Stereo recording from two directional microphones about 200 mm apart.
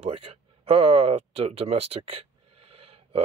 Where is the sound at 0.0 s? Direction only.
30° right (ahead or behind).